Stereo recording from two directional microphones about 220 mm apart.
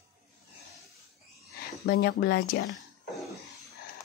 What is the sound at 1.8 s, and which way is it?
Speech, 45° left (ahead or behind).